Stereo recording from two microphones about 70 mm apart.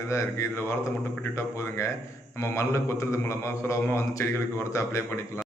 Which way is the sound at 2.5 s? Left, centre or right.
Left.